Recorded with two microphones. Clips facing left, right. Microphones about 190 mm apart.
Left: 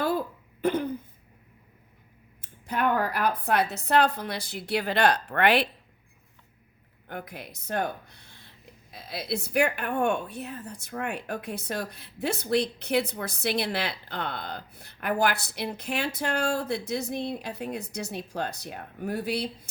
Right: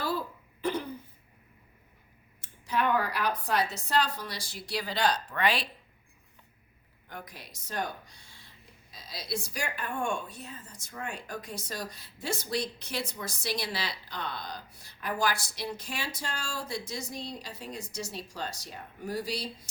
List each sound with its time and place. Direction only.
0.0 s throat clearing: 55° left (ahead or behind)
2.6 s speech: 50° left (ahead or behind)
7.1 s speech: 60° left (ahead or behind)